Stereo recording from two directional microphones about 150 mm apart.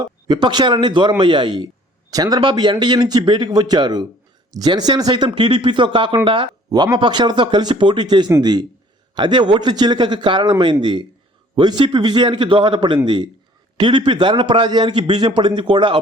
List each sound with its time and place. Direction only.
0.3 s a man's voice: 30° right (ahead or behind)